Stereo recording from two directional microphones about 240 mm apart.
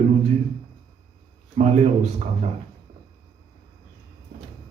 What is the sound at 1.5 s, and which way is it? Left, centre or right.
Speech, right.